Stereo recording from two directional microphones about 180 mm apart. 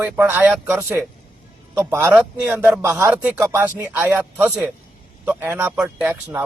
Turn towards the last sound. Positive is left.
turn(degrees=-10)  # may be behind; listen again after turning